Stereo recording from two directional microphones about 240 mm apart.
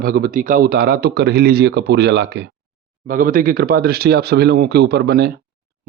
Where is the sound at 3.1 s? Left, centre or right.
Right.